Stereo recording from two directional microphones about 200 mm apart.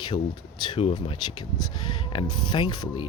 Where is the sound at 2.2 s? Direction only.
90° left.